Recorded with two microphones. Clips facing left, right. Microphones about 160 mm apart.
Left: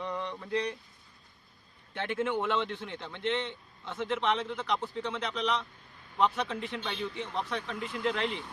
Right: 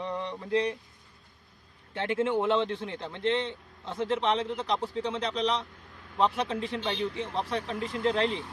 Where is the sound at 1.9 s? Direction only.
30° right (ahead or behind).